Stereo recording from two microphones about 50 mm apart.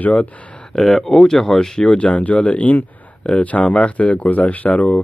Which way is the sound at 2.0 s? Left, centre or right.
Left.